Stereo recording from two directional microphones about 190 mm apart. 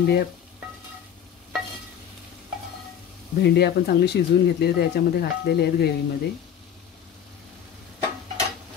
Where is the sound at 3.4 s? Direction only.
60° left (ahead or behind).